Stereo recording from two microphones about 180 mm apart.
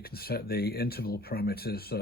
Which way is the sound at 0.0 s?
60° left (ahead or behind).